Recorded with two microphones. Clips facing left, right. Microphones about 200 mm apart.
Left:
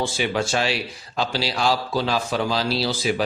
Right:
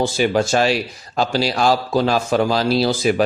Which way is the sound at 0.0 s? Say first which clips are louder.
Right 6 dB; 40° right (ahead or behind).